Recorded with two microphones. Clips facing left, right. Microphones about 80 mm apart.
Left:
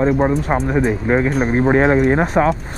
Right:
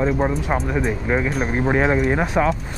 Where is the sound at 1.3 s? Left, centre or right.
Centre.